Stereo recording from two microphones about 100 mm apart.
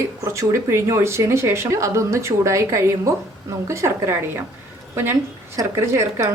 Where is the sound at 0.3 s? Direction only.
25° right (ahead or behind).